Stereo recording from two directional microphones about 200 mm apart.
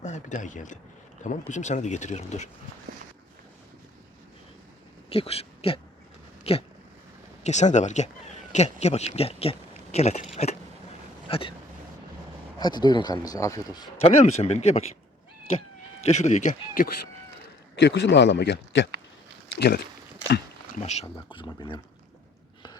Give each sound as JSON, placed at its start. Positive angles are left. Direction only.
{"t": 0.0, "sound": "speech", "side_deg": 35}
{"t": 5.0, "sound": "speech", "side_deg": 30}
{"t": 6.4, "sound": "a sound", "side_deg": 30}
{"t": 7.4, "sound": "speech", "side_deg": 35}
{"t": 11.3, "sound": "speech", "side_deg": 25}
{"t": 12.5, "sound": "speech", "side_deg": 20}
{"t": 14.0, "sound": "speech", "side_deg": 35}
{"t": 16.0, "sound": "speech", "side_deg": 35}
{"t": 17.7, "sound": "speech", "side_deg": 60}
{"t": 20.7, "sound": "speech", "side_deg": 35}